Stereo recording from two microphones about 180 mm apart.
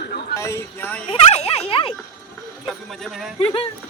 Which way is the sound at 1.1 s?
35° left (ahead or behind).